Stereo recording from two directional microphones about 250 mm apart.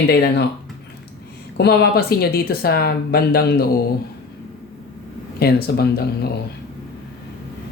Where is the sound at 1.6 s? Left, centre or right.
Left.